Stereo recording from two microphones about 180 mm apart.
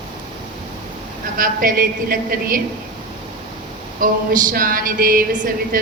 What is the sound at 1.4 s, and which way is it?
A woman's voice, 50° right (ahead or behind).